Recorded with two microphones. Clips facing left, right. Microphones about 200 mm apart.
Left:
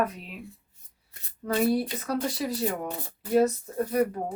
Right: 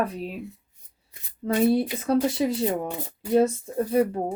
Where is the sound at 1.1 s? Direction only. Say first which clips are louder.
Right 3 dB; 20° right (ahead or behind).